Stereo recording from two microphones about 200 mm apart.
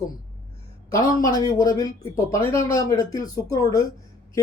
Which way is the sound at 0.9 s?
15° left (ahead or behind).